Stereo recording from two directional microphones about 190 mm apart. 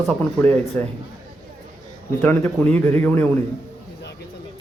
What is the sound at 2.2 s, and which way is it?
Speech, 10° left (ahead or behind).